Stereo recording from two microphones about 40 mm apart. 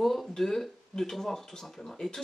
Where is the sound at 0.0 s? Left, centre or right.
Centre.